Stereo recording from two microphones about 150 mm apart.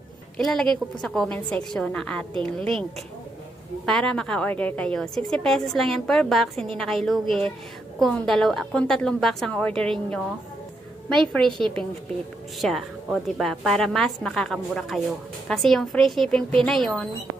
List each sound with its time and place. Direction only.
0.3 s a woman's voice: 5° left (ahead or behind)
3.8 s a woman's voice: 5° left (ahead or behind)
11.5 s a woman's voice: 35° right (ahead or behind)
12.6 s a woman's voice: centre (ahead or behind)